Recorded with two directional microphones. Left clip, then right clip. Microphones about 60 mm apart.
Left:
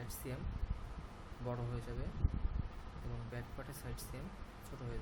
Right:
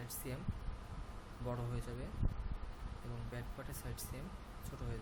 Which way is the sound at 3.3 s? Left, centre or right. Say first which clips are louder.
Even; centre.